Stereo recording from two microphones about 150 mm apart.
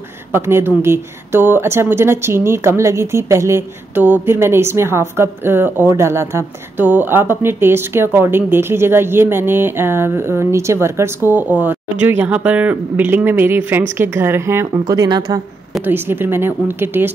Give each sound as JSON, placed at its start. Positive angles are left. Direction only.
{"t": 0.3, "sound": "a woman's voice", "side_deg": -15}
{"t": 15.8, "sound": "a woman's voice", "side_deg": -15}